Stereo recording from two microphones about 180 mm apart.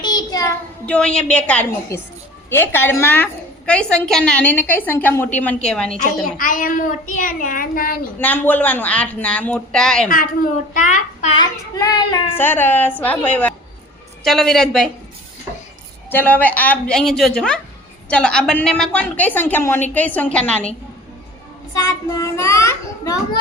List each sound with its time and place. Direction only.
0.0 s child singing: 25° left (ahead or behind)
0.9 s a woman's voice: 5° left (ahead or behind)
6.2 s a child's voice: 50° left (ahead or behind)
8.2 s a woman's voice: 10° left (ahead or behind)
10.1 s a child's voice: 50° left (ahead or behind)
11.3 s child singing: 20° left (ahead or behind)
12.3 s a woman's voice: 10° left (ahead or behind)
16.0 s a woman's voice: 10° left (ahead or behind)
21.8 s a woman's voice: 20° left (ahead or behind)